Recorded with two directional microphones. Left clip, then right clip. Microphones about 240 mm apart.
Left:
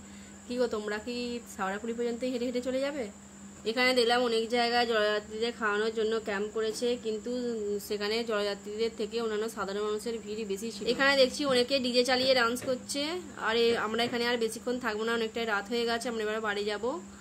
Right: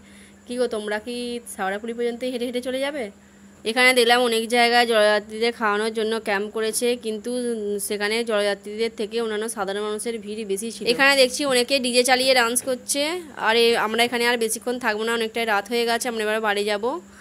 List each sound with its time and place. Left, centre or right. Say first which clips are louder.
0.5 s speech: right 7 dB; right